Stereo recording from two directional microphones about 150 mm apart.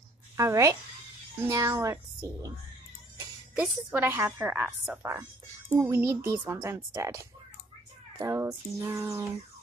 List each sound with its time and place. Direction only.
0.4 s speech: 20° right (ahead or behind)
5.8 s speech: 15° right (ahead or behind)